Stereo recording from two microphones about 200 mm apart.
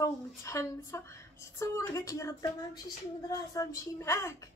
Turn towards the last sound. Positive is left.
turn(degrees=15)  # may be behind; listen again after turning